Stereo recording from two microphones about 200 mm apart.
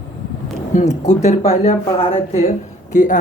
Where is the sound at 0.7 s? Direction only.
35° left (ahead or behind).